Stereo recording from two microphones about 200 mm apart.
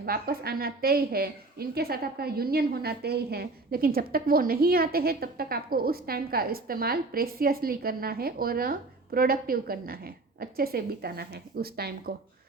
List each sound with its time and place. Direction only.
0.0 s a woman's voice: 50° right (ahead or behind)